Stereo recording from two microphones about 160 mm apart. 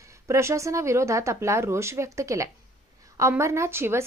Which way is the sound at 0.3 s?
20° right (ahead or behind).